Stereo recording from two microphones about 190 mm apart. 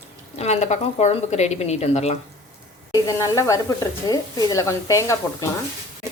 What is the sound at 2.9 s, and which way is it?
Speech, 15° left (ahead or behind).